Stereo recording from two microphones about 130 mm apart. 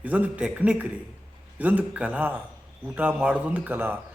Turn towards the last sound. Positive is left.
turn(degrees=-15)  # may be behind; listen again after turning